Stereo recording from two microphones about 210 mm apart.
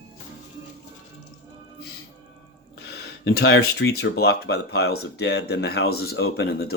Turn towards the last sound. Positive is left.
turn(degrees=50)  # may be behind; listen again after turning